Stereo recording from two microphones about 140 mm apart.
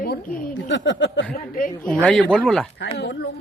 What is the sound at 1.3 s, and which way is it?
Speech, 90° left.